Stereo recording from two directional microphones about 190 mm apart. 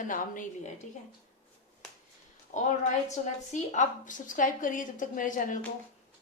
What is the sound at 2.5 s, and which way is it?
A woman's voice, 40° left (ahead or behind).